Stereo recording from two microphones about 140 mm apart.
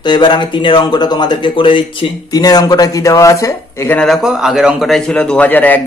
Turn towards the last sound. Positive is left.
turn(degrees=10)  # may be behind; listen again after turning